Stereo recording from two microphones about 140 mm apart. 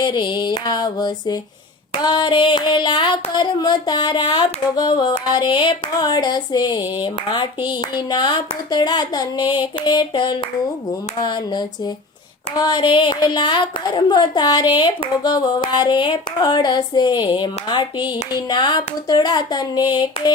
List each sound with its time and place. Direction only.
0.0 s a woman's voice: 35° left (ahead or behind)